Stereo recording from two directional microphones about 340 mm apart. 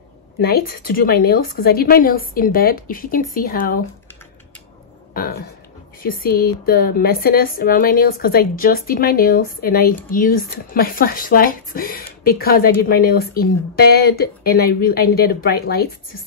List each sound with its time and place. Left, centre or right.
0.4 s a woman's voice: left
5.1 s a sound: left
6.0 s a woman's voice: left